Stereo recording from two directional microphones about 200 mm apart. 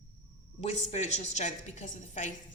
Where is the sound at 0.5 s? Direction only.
35° left (ahead or behind).